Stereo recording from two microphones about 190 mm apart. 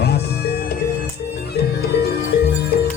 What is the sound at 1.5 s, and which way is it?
Music, 55° left (ahead or behind).